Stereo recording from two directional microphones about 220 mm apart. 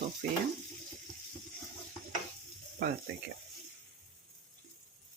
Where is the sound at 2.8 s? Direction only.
45° right (ahead or behind).